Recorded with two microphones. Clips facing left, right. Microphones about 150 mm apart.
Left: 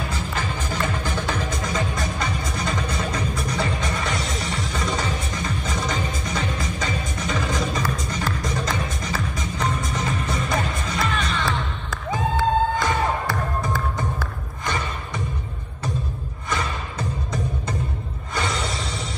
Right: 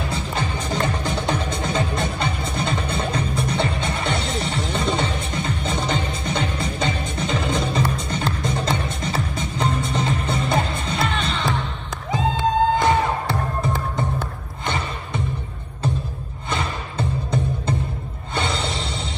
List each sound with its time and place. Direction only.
0.7 s music: 30° right (ahead or behind)
16.4 s music: 30° right (ahead or behind)